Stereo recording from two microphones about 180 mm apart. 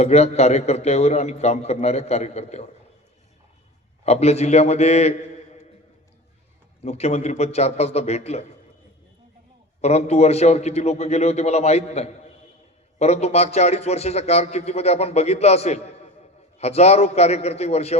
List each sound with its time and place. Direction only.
0.0 s a man's voice: 35° left (ahead or behind)
4.0 s a man's voice: 35° left (ahead or behind)
6.8 s a man's voice: 35° left (ahead or behind)
9.8 s a man's voice: 35° left (ahead or behind)